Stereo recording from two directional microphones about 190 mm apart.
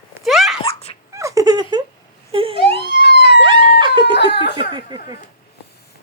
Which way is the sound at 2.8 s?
60° left (ahead or behind).